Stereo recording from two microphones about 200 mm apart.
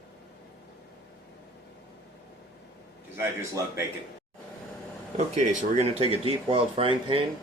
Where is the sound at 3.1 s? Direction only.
15° right (ahead or behind).